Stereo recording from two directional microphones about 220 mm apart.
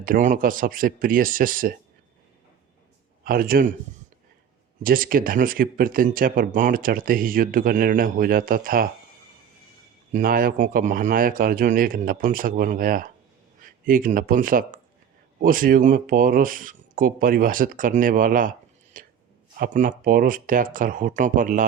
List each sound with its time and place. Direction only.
0.0 s speech: 35° right (ahead or behind)
3.2 s speech: 40° right (ahead or behind)
4.8 s speech: 40° right (ahead or behind)
10.1 s speech: 40° right (ahead or behind)
18.9 s a sound: 40° right (ahead or behind)
19.5 s speech: 40° right (ahead or behind)